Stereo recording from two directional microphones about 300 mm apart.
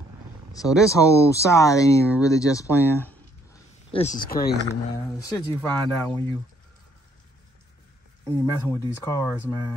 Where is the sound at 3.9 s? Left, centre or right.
Left.